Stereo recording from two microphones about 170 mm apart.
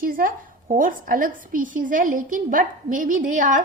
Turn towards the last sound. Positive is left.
turn(degrees=-50)  # may be behind; listen again after turning